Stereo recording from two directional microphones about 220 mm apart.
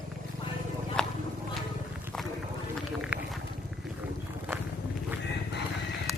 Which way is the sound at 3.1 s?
5° right (ahead or behind).